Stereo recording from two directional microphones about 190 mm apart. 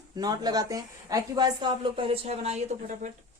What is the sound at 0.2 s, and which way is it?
Speech, 20° right (ahead or behind).